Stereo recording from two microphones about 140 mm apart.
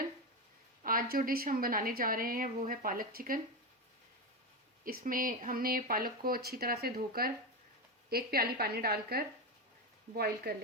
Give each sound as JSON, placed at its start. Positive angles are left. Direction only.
{"t": 0.9, "sound": "a woman's voice", "side_deg": -90}
{"t": 4.9, "sound": "a woman's voice", "side_deg": -85}